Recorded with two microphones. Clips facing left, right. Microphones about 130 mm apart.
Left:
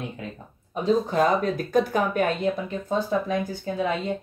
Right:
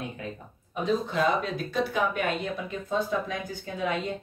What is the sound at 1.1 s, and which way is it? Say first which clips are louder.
Speech: left 4 dB; 45° left (ahead or behind).